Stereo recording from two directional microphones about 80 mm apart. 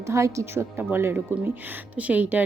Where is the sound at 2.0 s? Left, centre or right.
Centre.